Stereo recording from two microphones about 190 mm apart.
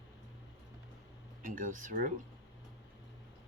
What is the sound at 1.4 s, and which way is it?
Speech, 45° right (ahead or behind).